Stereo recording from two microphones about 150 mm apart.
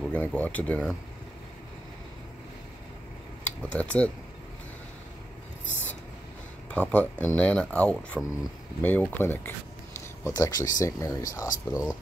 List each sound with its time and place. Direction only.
0.0 s speech: 10° left (ahead or behind)
3.7 s speech: 10° left (ahead or behind)
6.7 s speech: 10° left (ahead or behind)